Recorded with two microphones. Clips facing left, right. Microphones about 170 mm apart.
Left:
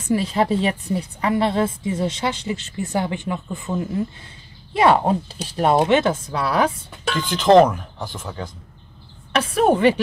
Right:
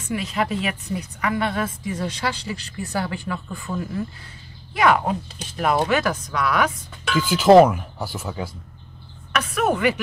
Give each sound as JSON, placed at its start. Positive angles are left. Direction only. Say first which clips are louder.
{"t": 0.1, "sound": "a woman's voice", "louder": "left 5 dB", "side_deg": 30}
{"t": 7.2, "sound": "speech", "louder": "right 1 dB", "side_deg": -5}
{"t": 9.3, "sound": "speech", "louder": "left 4 dB", "side_deg": 30}